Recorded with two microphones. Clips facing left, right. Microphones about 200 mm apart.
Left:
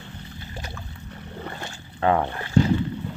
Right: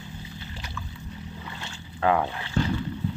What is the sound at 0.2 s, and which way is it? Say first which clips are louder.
Boat: left 2 dB; 55° left (ahead or behind).